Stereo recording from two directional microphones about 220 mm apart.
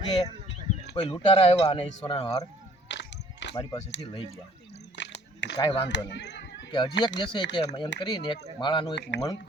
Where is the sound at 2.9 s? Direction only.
55° left (ahead or behind).